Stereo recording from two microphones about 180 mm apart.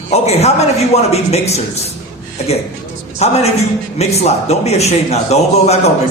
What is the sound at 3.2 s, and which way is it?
A man's voice, 35° left (ahead or behind).